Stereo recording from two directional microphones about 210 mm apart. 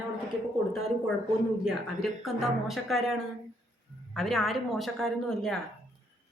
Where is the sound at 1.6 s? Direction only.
Centre (ahead or behind).